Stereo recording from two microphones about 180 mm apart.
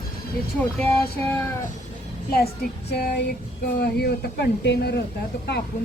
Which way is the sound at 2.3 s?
60° left (ahead or behind).